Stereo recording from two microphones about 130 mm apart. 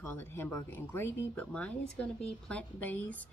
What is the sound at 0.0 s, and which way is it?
Speech, 20° left (ahead or behind).